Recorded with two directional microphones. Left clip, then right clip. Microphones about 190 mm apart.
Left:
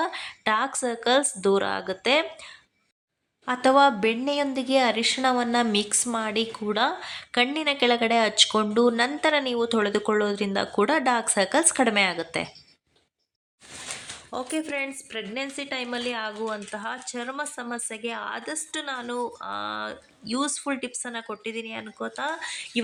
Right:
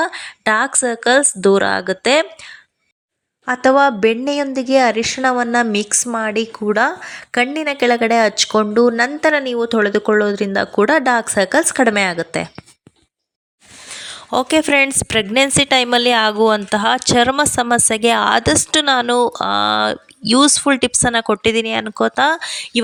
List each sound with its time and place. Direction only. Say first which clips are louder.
0.0 s speech: right 8 dB; 40° right (ahead or behind)
3.4 s speech: right 6 dB; 35° right (ahead or behind)
9.0 s speech: right 8 dB; 20° right (ahead or behind)
9.7 s speech: right 11 dB; 35° right (ahead or behind)
14.3 s a woman's voice: right 16 dB; 60° right (ahead or behind)